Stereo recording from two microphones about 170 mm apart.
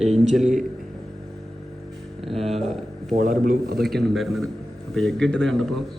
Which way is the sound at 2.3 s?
35° right (ahead or behind).